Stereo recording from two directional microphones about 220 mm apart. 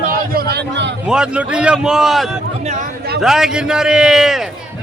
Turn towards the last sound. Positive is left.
turn(degrees=0)  # may be behind; listen again after turning